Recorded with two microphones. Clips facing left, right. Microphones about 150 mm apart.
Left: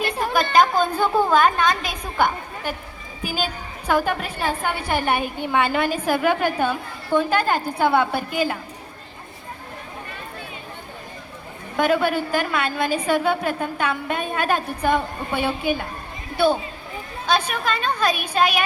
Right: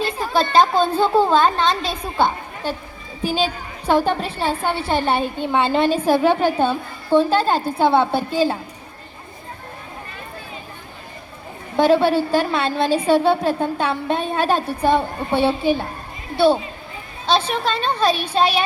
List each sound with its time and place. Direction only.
0.0 s a sound: 65° left (ahead or behind)
0.3 s a woman's voice: 30° right (ahead or behind)
3.8 s a woman's voice: 30° right (ahead or behind)
11.8 s a woman's voice: 30° right (ahead or behind)
17.2 s a woman's voice: 30° right (ahead or behind)